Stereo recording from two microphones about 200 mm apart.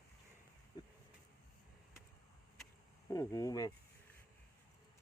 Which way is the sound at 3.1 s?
15° left (ahead or behind).